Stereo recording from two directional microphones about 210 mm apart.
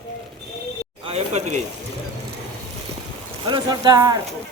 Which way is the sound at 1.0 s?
30° right (ahead or behind).